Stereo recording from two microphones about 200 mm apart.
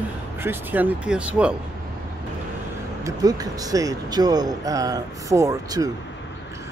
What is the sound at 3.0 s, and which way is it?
Speech, 20° right (ahead or behind).